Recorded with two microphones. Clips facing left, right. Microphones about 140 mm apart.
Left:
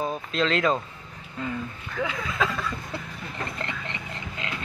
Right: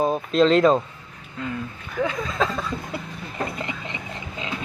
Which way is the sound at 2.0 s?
15° right (ahead or behind).